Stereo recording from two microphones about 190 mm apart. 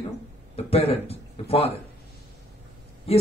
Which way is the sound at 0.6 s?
30° left (ahead or behind).